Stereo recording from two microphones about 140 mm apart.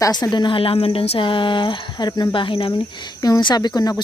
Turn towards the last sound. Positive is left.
turn(degrees=30)  # may be behind; listen again after turning